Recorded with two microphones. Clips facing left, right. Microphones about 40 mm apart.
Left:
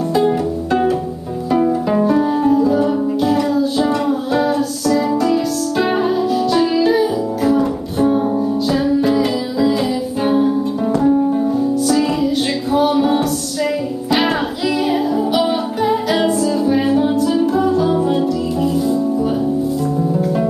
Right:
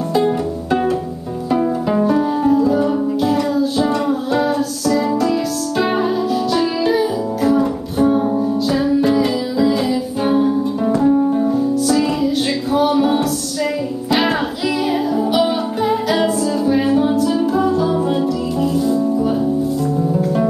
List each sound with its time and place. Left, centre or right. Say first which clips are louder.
0.1 s music: even; centre
12.7 s music: left 1 dB; centre
14.9 s music: left 1 dB; centre